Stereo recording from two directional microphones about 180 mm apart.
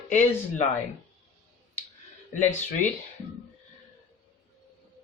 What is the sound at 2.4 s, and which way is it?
Speech, 45° left (ahead or behind).